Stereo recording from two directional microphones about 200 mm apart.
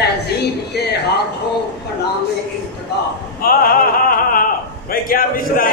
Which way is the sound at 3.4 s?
45° left (ahead or behind).